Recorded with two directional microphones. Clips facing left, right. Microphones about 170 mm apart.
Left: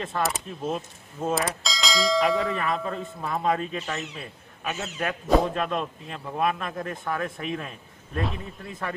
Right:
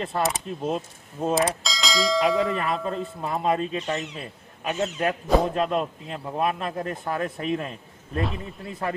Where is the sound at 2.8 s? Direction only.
30° right (ahead or behind).